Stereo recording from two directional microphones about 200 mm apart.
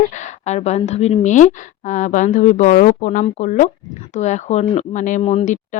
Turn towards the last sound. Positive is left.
turn(degrees=35)  # may be behind; listen again after turning